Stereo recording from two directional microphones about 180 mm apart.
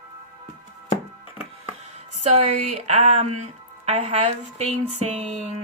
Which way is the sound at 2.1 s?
35° right (ahead or behind).